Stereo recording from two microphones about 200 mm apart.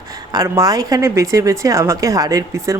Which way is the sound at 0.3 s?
15° right (ahead or behind).